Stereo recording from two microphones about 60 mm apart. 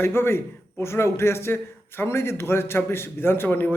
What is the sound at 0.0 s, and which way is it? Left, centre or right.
A man's voice, left.